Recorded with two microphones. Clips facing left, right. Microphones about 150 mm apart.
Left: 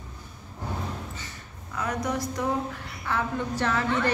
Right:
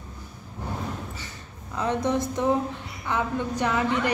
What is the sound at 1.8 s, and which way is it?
A woman's voice, 25° right (ahead or behind).